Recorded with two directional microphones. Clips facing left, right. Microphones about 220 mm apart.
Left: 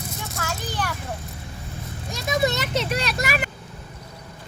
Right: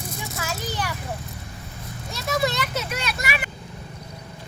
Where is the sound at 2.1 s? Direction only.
15° left (ahead or behind); by 3.5 s 40° left (ahead or behind).